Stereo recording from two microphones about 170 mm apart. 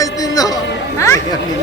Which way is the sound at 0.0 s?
20° left (ahead or behind).